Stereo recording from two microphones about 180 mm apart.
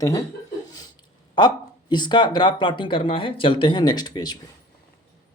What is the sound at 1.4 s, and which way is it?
Speech, 25° left (ahead or behind).